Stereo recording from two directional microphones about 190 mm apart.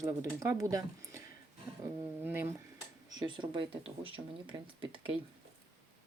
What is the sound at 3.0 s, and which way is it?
Speech, 25° right (ahead or behind).